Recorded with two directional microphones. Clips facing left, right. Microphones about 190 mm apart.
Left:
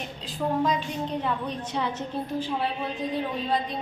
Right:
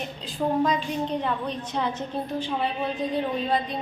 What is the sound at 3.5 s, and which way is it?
Child singing, centre (ahead or behind).